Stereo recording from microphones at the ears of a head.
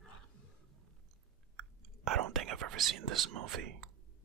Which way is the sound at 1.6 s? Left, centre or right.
Right.